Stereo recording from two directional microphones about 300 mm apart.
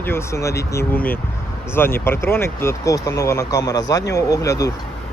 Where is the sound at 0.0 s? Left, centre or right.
Centre.